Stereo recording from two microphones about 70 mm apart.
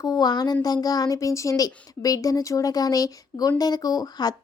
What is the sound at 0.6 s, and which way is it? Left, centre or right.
Speech, left.